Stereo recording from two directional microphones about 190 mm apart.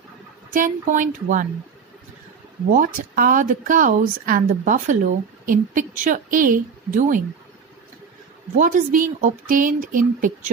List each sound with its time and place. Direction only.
0.5 s speech: 45° right (ahead or behind)
2.7 s speech: 50° right (ahead or behind)
8.5 s speech: 45° right (ahead or behind)